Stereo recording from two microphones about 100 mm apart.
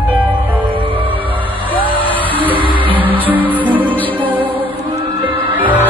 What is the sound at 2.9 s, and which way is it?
Music, 15° right (ahead or behind).